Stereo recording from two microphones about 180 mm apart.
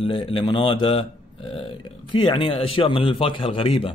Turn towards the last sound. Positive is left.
turn(degrees=30)  # may be behind; listen again after turning